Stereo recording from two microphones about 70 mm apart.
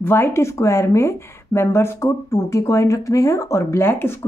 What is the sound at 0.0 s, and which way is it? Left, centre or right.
Speech, left.